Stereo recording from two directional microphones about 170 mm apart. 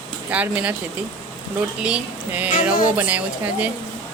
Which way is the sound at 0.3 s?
10° right (ahead or behind).